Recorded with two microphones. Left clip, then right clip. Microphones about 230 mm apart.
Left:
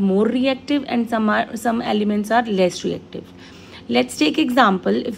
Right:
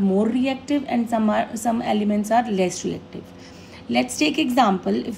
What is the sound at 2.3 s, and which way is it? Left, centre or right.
Speech, left.